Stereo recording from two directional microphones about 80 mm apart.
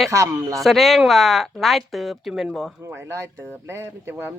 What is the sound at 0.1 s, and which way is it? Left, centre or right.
Speech, right.